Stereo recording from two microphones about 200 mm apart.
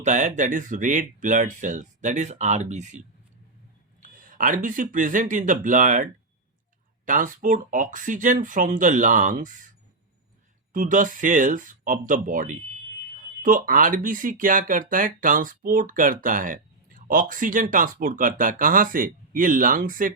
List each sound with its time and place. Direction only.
0.0 s speech: 35° right (ahead or behind)
4.0 s speech: 40° right (ahead or behind)
10.7 s speech: 40° right (ahead or behind)